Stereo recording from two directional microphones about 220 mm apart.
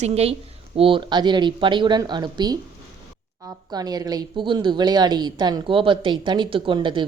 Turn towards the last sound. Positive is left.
turn(degrees=-20)  # may be behind; listen again after turning